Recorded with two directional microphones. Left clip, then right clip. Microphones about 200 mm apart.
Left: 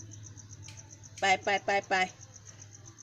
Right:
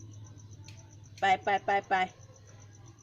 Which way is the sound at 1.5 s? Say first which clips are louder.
Right 1 dB; 15° left (ahead or behind).